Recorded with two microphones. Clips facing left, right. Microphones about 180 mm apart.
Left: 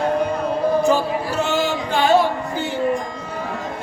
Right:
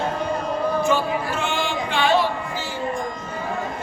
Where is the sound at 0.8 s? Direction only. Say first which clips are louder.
Left 3 dB; 40° left (ahead or behind).